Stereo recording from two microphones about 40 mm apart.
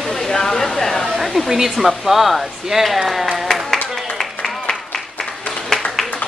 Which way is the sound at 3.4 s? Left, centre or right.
Centre.